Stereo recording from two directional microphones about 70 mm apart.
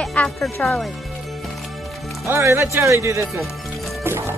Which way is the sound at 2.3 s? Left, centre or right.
Right.